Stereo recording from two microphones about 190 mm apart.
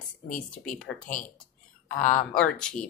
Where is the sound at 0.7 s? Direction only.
5° left (ahead or behind).